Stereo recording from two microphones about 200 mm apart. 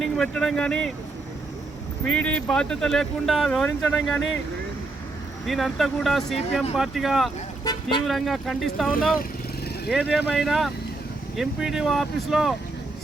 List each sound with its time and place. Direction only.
0.0 s speech: centre (ahead or behind)
2.0 s speech: 5° left (ahead or behind)
5.5 s speech: centre (ahead or behind)
7.6 s vehicle: 20° left (ahead or behind)
8.0 s speech: centre (ahead or behind)
9.9 s speech: centre (ahead or behind)